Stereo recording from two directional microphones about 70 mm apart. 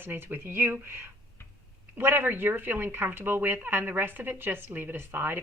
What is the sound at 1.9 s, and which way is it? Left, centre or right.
Speech, right.